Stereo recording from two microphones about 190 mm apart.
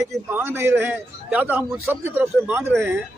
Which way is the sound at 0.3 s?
10° right (ahead or behind).